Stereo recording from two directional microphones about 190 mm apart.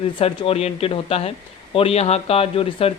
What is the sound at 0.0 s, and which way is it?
Speech, 30° left (ahead or behind).